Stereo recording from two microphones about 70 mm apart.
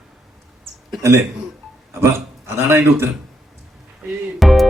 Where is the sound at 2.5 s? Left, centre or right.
Right.